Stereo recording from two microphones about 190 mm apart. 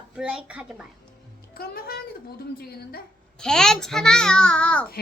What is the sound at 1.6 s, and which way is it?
A woman's voice, 50° left (ahead or behind).